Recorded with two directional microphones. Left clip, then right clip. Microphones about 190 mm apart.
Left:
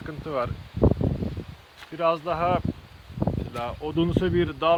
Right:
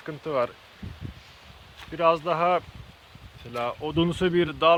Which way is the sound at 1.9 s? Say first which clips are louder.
Right 2 dB; 45° right (ahead or behind).